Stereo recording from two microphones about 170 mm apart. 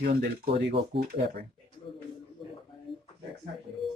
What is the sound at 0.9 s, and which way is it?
Speech, 90° right.